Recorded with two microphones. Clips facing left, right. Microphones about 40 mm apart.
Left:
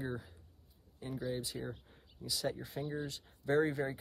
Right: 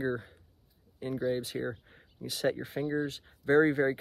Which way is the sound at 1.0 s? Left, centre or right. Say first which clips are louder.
Right 8 dB; right.